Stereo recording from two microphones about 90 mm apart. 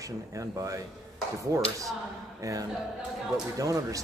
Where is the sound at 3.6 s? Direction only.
40° right (ahead or behind).